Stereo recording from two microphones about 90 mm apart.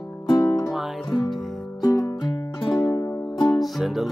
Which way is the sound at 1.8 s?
40° left (ahead or behind).